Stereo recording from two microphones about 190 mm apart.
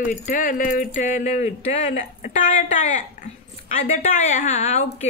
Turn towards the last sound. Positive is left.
turn(degrees=35)  # may be behind; listen again after turning